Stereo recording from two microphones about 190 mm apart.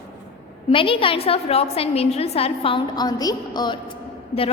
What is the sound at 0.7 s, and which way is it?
A woman's voice, 30° left (ahead or behind).